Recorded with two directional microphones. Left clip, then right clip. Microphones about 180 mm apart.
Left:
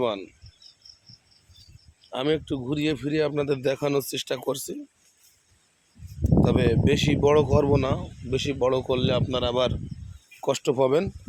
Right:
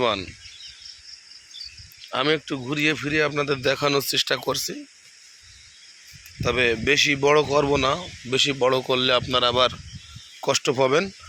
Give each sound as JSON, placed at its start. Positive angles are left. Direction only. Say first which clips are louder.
{"t": 0.0, "sound": "speech", "louder": "right 4 dB", "side_deg": 10}
{"t": 2.1, "sound": "speech", "louder": "right 3 dB", "side_deg": 20}
{"t": 6.4, "sound": "speech", "louder": "right 3 dB", "side_deg": 20}